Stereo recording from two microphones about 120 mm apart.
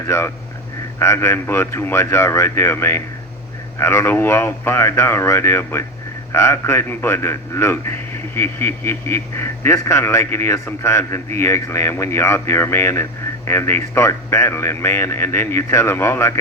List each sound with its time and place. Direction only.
0.1 s speech: 20° left (ahead or behind)